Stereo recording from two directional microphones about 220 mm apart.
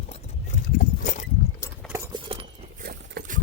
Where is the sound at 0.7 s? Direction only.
35° left (ahead or behind).